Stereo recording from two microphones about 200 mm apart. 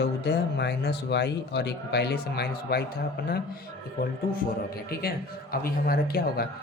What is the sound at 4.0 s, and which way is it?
Speech, 45° left (ahead or behind).